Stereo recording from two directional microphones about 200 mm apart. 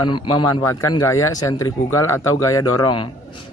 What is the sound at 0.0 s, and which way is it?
A man's voice, 25° left (ahead or behind).